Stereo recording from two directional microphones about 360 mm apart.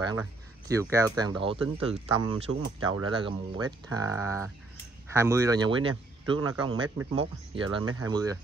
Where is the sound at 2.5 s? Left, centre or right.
Right.